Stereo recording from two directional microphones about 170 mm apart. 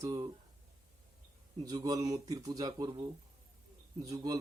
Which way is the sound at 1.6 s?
20° right (ahead or behind).